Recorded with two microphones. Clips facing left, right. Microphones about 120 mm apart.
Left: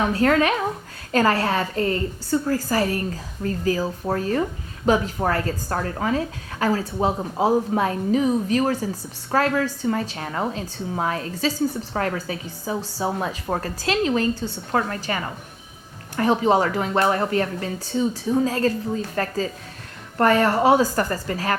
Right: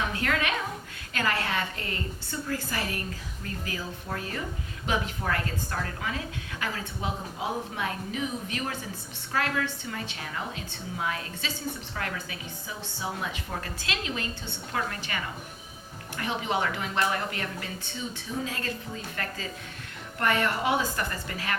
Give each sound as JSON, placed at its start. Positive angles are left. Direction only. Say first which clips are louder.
{"t": 0.0, "sound": "a woman's voice", "louder": "left 10 dB", "side_deg": 40}